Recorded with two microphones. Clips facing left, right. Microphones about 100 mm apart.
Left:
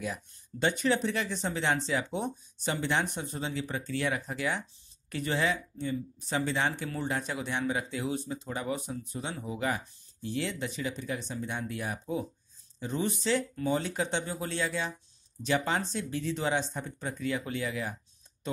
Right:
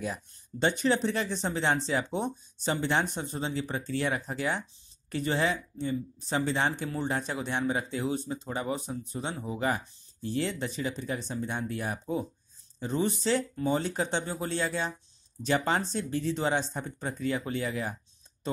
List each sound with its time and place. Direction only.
0.0 s speech: 30° right (ahead or behind)